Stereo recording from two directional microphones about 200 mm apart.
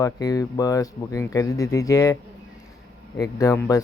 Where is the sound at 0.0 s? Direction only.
20° left (ahead or behind).